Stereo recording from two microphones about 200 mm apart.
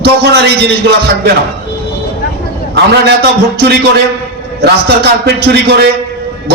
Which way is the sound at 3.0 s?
55° right (ahead or behind).